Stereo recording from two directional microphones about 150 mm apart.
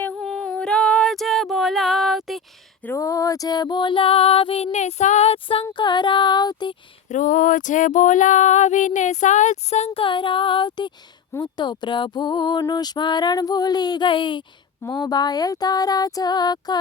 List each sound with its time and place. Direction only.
0.0 s female singing: 5° left (ahead or behind)
2.8 s female singing: 20° left (ahead or behind)
7.1 s female singing: 60° left (ahead or behind); by 10.9 s 30° left (ahead or behind)
11.3 s a sound: 30° left (ahead or behind)